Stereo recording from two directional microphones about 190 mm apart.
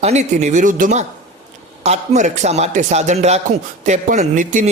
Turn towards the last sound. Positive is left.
turn(degrees=-45)  # may be behind; listen again after turning